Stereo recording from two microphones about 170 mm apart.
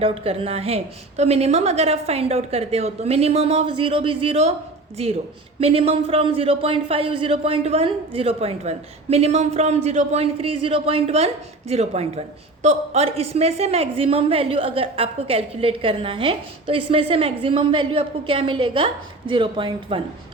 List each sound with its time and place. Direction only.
0.0 s a woman's voice: 35° right (ahead or behind)
5.5 s a woman's voice: 35° right (ahead or behind)